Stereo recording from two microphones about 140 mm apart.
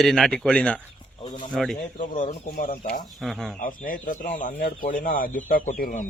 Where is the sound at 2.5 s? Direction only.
90° left.